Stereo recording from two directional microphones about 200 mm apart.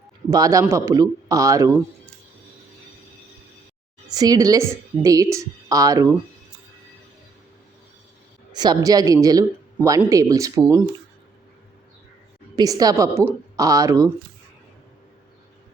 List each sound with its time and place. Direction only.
0.3 s speech: 20° right (ahead or behind)
4.1 s speech: 20° right (ahead or behind)
8.5 s speech: 20° right (ahead or behind)
12.5 s speech: 20° right (ahead or behind)